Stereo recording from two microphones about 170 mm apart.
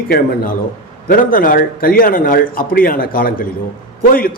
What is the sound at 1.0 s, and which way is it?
A man's voice, 55° left (ahead or behind).